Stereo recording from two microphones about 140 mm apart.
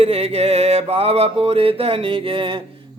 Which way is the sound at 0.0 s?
45° right (ahead or behind).